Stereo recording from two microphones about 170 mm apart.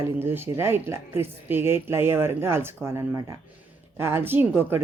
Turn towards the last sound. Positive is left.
turn(degrees=-10)  # may be behind; listen again after turning